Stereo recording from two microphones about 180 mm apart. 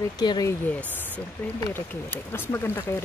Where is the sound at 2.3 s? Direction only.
10° left (ahead or behind).